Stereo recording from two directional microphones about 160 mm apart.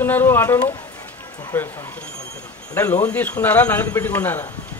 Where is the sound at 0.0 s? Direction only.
15° left (ahead or behind).